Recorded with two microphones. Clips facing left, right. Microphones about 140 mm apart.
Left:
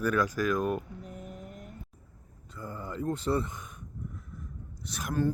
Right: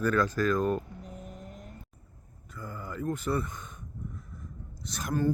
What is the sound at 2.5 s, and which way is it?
Speech, 25° left (ahead or behind).